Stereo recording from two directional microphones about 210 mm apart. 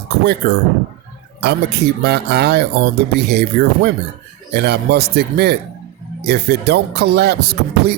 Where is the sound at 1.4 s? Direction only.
50° right (ahead or behind).